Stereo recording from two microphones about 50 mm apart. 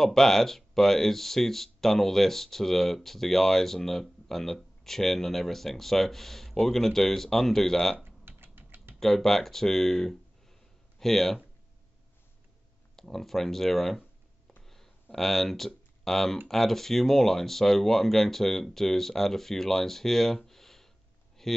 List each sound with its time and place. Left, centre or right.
0.0 s speech: centre
8.0 s hiccup: right
9.0 s speech: centre
12.9 s speech: centre
14.6 s a sound: centre
16.4 s speech: centre